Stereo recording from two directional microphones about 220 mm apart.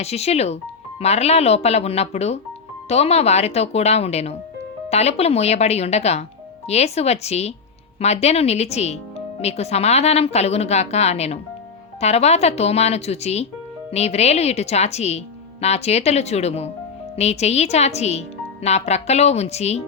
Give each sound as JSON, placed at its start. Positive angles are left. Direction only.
{"t": 0.0, "sound": "speech", "side_deg": 30}